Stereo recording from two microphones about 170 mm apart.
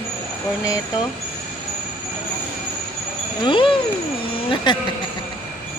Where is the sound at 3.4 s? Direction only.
30° left (ahead or behind).